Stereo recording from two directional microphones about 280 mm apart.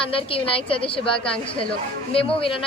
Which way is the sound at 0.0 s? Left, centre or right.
Centre.